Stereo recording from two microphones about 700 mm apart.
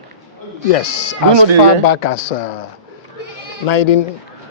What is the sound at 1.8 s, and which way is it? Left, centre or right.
Speech, left.